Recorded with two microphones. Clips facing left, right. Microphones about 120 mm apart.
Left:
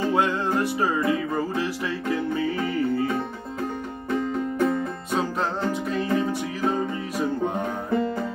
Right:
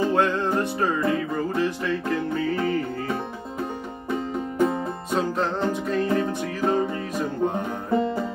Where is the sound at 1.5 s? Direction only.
10° left (ahead or behind).